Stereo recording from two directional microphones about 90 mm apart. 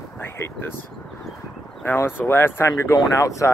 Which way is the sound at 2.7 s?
40° left (ahead or behind).